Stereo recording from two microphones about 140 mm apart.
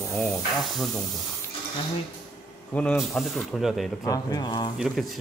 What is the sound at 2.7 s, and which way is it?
Speech, 10° left (ahead or behind).